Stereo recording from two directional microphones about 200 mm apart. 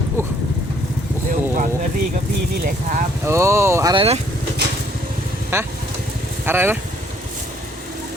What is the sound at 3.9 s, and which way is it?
Speech, 30° right (ahead or behind).